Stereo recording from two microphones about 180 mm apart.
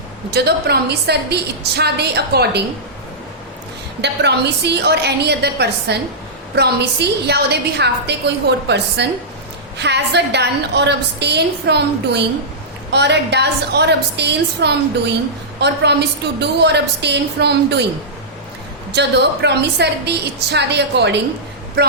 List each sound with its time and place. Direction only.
0.3 s a woman's voice: 65° right (ahead or behind)
4.0 s a woman's voice: 70° right (ahead or behind)
18.9 s a woman's voice: 70° right (ahead or behind)